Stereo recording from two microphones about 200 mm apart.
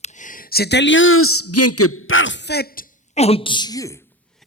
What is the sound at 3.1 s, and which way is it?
Speech, 30° left (ahead or behind).